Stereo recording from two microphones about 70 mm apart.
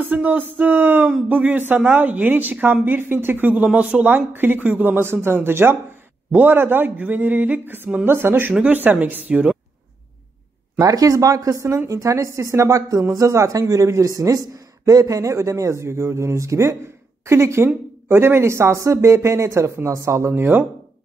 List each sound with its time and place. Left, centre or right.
0.0 s a woman's voice: right
4.1 s a woman's voice: right
10.8 s a man's voice: right